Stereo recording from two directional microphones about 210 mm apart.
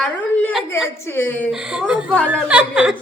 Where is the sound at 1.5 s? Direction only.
5° right (ahead or behind).